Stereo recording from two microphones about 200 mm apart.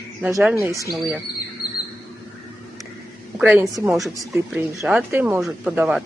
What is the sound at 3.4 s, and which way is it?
A woman's voice, 5° right (ahead or behind).